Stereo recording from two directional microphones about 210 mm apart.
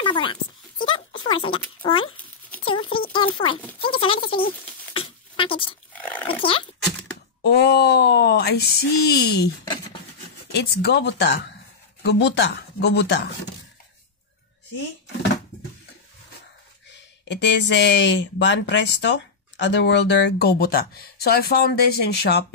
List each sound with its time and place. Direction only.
0.0 s speech: 25° left (ahead or behind)
0.9 s a sound: 25° left (ahead or behind)
3.1 s speech: 25° left (ahead or behind)
4.9 s a sound: 25° left (ahead or behind)
5.9 s dog: 5° left (ahead or behind)
6.2 s dog: 25° left (ahead or behind)
7.4 s a sound: 50° left (ahead or behind)
10.5 s speech: 50° left (ahead or behind)
17.2 s speech: 55° left (ahead or behind)